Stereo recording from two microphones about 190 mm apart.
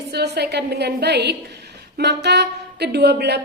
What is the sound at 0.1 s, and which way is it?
A woman's voice, 60° right (ahead or behind).